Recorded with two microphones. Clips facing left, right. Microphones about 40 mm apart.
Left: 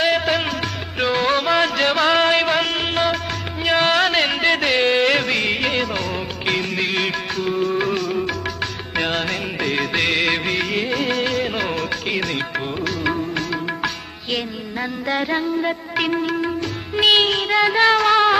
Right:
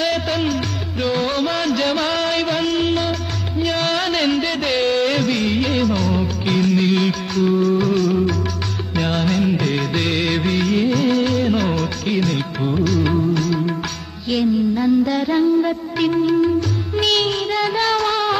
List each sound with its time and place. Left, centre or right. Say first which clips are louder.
0.0 s music: left 1 dB; left
3.6 s music: left 4 dB; centre
4.8 s music of bollywood: even; left
9.0 s music: right 5 dB; left
9.9 s music of bollywood: left 1 dB; left
10.5 s music: right 3 dB; centre
11.4 s music of bollywood: right 4 dB; centre
12.7 s music: right 5 dB; centre
14.3 s music: right 8 dB; left